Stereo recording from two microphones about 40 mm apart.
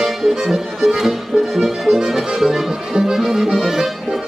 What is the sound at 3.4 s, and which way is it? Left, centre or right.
Music, centre.